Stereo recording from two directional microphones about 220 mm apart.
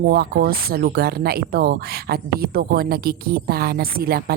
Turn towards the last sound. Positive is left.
turn(degrees=-45)  # may be behind; listen again after turning